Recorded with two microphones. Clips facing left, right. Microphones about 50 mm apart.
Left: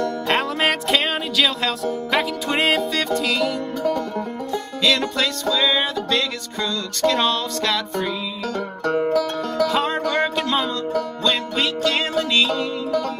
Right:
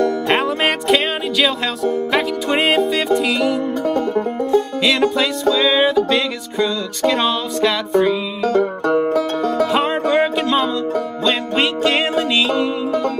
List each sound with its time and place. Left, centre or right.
0.3 s music: centre
4.1 s music: right
10.2 s music: centre
11.5 s music: right
12.4 s music: centre